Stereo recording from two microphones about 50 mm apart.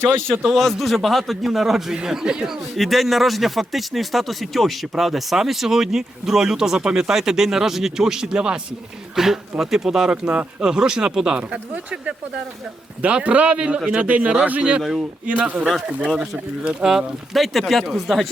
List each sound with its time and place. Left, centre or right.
0.4 s a man's voice: centre
2.7 s speech: centre; by 14.6 s right
14.8 s a man's voice: centre
15.3 s speech: right
16.0 s a man's voice: centre
16.6 s speech: centre
17.3 s a man's voice: centre